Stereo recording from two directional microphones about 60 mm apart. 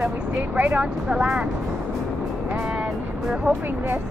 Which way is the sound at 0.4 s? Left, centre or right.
Right.